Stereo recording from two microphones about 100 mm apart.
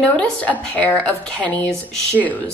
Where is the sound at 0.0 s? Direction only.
10° left (ahead or behind).